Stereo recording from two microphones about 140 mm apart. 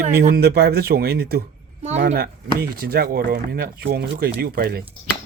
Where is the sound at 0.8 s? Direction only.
90° right.